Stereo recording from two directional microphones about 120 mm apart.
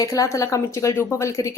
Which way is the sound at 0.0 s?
25° left (ahead or behind).